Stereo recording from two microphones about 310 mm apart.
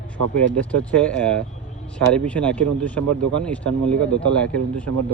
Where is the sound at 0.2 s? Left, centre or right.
Right.